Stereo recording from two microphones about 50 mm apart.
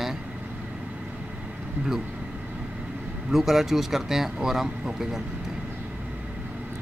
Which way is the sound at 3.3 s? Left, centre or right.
Centre.